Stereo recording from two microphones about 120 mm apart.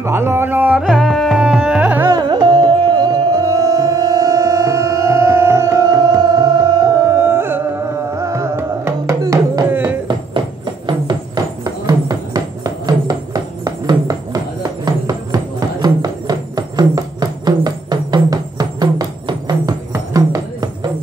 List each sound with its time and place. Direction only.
0.0 s carnatic music: 20° right (ahead or behind)
0.8 s carnatic music: centre (ahead or behind)
2.1 s music: 40° right (ahead or behind)
9.7 s a sound: 15° right (ahead or behind)
10.9 s music: 35° right (ahead or behind)